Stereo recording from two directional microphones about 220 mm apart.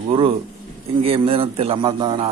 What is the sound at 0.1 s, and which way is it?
A man's voice, 25° right (ahead or behind).